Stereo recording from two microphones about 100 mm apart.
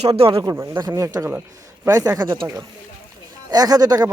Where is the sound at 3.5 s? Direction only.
40° right (ahead or behind).